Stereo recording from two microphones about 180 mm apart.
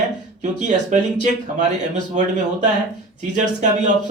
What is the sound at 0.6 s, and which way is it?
Speech, 40° right (ahead or behind).